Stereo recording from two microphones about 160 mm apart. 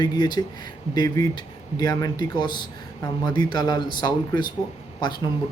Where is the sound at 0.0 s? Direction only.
25° left (ahead or behind).